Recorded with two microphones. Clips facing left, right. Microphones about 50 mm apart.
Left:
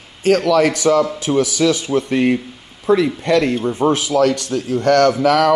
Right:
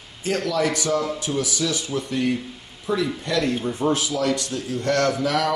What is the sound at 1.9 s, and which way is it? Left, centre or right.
Speech, left.